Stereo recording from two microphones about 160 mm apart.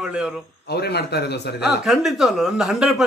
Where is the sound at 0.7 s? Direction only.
90° left.